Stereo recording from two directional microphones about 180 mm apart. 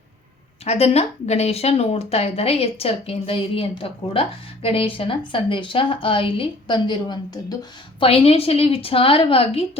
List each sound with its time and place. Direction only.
0.6 s speech: 35° left (ahead or behind)